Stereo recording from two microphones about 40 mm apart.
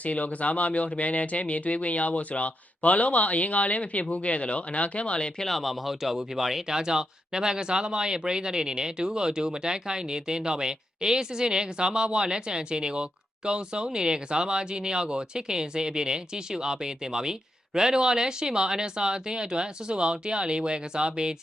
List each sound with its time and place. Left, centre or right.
0.0 s speech: left
5.4 s speech: centre; by 21.3 s right